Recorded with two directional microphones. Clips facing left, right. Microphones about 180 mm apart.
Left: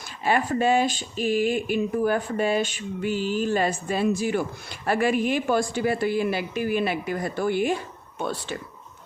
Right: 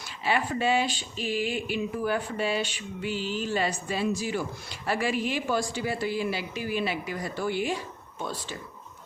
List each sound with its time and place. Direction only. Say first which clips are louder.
0.3 s speech: left 4 dB; 45° left (ahead or behind)
8.2 s speech: left 5 dB; 65° left (ahead or behind)